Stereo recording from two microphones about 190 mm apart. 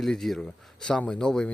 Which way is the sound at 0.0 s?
Centre (ahead or behind).